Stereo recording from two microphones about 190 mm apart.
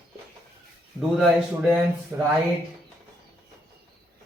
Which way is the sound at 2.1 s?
15° right (ahead or behind).